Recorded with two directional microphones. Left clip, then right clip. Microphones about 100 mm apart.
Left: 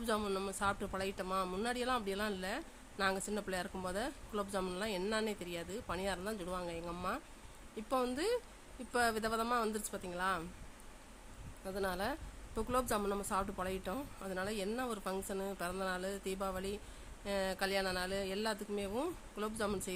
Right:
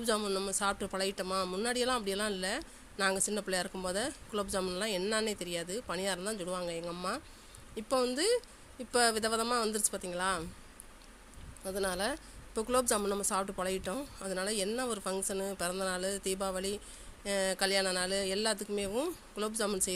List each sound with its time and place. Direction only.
0.0 s speech: 25° right (ahead or behind)
0.6 s a woman's voice: 35° right (ahead or behind)
1.3 s speech: 25° right (ahead or behind)
1.6 s a woman's voice: 35° right (ahead or behind)
11.7 s a woman's voice: 35° right (ahead or behind)
18.7 s a woman's voice: 25° right (ahead or behind)